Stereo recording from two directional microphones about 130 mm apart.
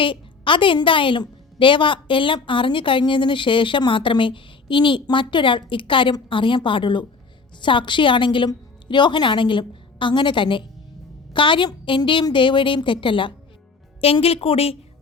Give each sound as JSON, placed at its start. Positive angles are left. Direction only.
{"t": 0.0, "sound": "a woman's voice", "side_deg": 40}